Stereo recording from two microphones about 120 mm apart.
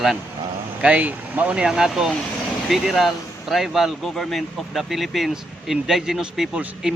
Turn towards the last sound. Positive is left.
turn(degrees=-5)  # may be behind; listen again after turning